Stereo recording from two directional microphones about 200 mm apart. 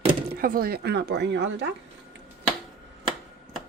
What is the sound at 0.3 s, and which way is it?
Speech, 45° right (ahead or behind).